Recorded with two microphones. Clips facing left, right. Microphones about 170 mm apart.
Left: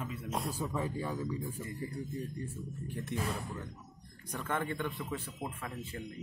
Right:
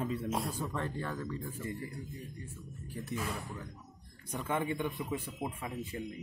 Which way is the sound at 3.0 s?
Centre (ahead or behind).